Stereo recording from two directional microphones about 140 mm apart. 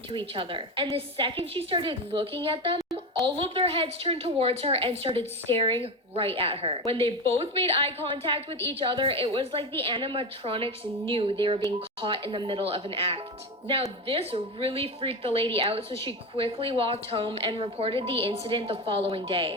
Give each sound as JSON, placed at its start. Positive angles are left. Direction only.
{"t": 0.1, "sound": "a woman's voice", "side_deg": -35}